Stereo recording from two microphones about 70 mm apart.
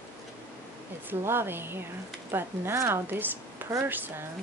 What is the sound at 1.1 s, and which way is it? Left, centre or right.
A woman's voice, right.